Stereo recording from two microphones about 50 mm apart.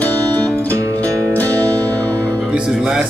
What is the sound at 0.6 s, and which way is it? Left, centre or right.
Music, right.